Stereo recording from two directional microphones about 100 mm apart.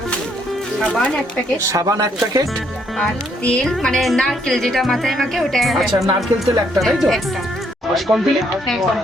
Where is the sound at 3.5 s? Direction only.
5° left (ahead or behind).